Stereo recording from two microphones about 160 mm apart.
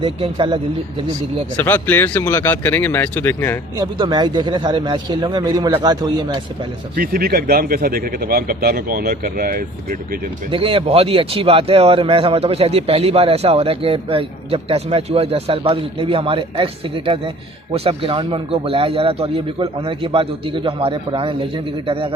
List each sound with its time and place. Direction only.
0.0 s speech: 30° right (ahead or behind)
1.5 s speech: 10° left (ahead or behind)
3.8 s a man's voice: 30° right (ahead or behind)
6.9 s speech: 70° right (ahead or behind)
10.5 s speech: 35° right (ahead or behind)